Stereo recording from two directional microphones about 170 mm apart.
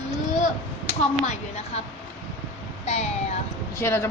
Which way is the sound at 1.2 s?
40° left (ahead or behind).